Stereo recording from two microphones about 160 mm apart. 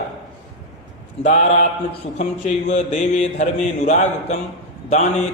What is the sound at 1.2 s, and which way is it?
A man's voice, 45° left (ahead or behind).